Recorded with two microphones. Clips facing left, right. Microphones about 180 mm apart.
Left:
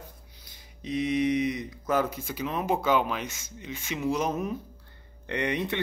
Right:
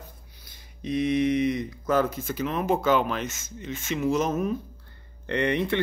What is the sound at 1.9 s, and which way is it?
Speech, 15° left (ahead or behind).